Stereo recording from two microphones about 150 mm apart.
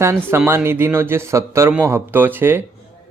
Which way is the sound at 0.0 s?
15° right (ahead or behind).